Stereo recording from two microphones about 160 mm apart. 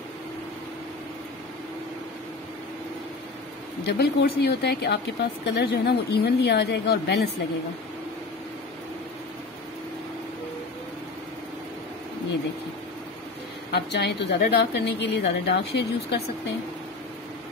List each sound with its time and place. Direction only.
3.8 s speech: 90° left
13.7 s speech: 90° left